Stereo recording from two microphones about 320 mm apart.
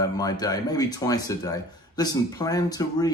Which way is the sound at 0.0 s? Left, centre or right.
Centre.